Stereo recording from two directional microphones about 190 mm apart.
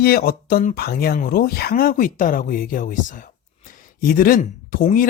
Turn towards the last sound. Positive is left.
turn(degrees=45)  # may be behind; listen again after turning